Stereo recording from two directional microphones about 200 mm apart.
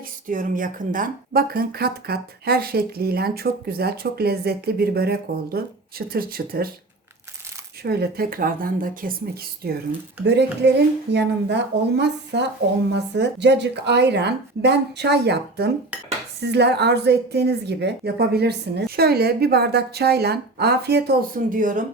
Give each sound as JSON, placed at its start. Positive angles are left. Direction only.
{"t": 0.3, "sound": "speech", "side_deg": -40}
{"t": 7.9, "sound": "speech", "side_deg": -50}
{"t": 10.2, "sound": "a woman's voice", "side_deg": -60}